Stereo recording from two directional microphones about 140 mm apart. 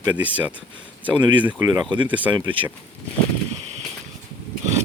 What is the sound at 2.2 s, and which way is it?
Speech, 35° right (ahead or behind).